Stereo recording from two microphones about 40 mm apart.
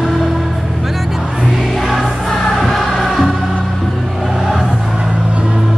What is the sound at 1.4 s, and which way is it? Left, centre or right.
Music, centre.